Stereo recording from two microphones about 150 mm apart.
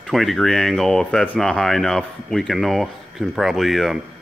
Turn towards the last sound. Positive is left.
turn(degrees=0)  # may be behind; listen again after turning